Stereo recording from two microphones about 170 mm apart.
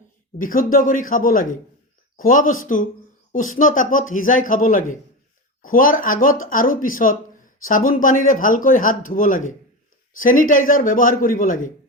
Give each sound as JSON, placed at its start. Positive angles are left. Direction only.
{"t": 0.3, "sound": "speech", "side_deg": 55}